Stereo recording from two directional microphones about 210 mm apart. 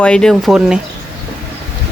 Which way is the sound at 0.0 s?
5° left (ahead or behind).